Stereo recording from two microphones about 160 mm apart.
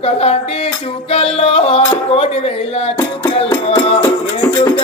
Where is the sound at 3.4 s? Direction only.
40° left (ahead or behind).